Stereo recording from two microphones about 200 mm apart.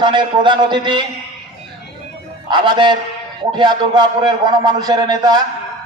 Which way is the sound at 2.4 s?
25° right (ahead or behind).